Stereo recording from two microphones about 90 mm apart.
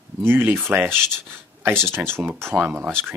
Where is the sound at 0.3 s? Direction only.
25° right (ahead or behind).